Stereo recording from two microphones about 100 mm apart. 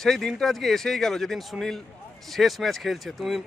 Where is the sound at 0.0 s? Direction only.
5° left (ahead or behind).